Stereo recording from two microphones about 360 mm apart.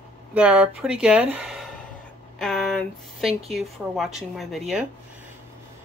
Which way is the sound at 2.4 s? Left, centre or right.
Centre.